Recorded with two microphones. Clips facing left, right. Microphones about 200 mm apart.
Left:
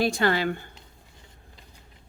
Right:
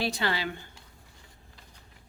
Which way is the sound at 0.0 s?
50° left (ahead or behind).